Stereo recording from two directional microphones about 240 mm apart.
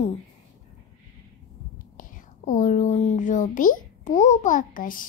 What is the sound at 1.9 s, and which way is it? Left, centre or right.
Speech, left.